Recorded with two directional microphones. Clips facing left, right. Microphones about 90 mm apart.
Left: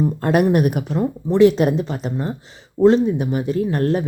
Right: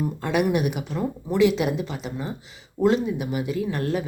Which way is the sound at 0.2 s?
45° left (ahead or behind).